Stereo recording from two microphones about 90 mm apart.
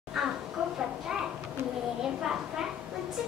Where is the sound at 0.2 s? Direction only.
5° right (ahead or behind).